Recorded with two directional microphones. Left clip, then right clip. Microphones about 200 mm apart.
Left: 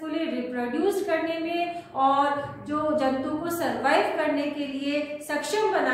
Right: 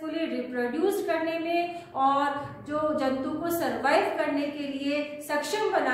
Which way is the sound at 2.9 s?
15° right (ahead or behind).